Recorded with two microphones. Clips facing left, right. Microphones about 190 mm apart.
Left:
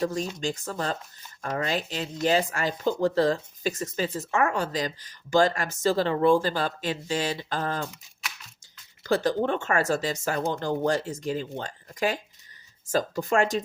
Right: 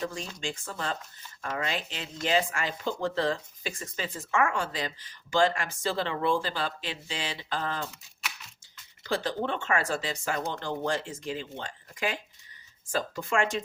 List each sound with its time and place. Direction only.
0.0 s speech: 40° left (ahead or behind)
9.0 s speech: 45° left (ahead or behind)